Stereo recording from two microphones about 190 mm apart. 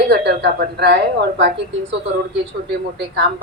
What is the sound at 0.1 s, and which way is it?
A woman's voice, 60° right (ahead or behind).